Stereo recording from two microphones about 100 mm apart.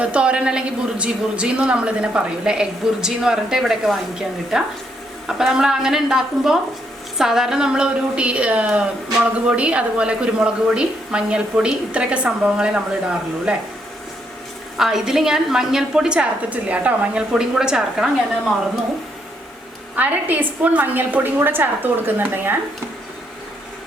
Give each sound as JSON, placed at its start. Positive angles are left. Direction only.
{"t": 0.0, "sound": "a woman's voice", "side_deg": -10}
{"t": 14.8, "sound": "a woman's voice", "side_deg": -5}
{"t": 20.0, "sound": "a woman's voice", "side_deg": -15}